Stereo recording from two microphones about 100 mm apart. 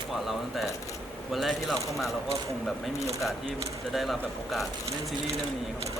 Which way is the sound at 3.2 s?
Centre (ahead or behind).